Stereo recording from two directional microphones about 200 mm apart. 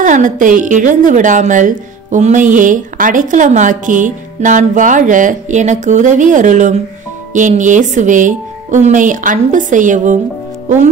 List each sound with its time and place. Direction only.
0.0 s a woman's voice: 40° right (ahead or behind)